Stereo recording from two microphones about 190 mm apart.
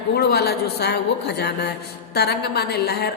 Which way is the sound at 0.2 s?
60° left (ahead or behind).